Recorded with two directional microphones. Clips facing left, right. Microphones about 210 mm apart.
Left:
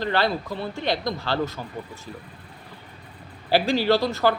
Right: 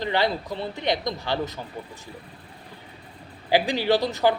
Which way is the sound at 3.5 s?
15° right (ahead or behind).